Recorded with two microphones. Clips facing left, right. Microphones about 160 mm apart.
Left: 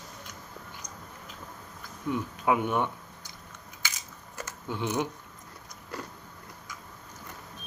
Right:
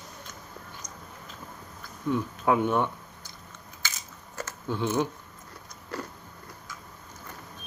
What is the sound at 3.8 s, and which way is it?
Crushing, 15° left (ahead or behind).